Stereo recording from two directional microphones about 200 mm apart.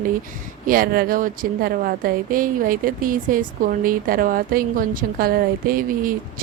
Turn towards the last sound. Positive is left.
turn(degrees=-45)  # may be behind; listen again after turning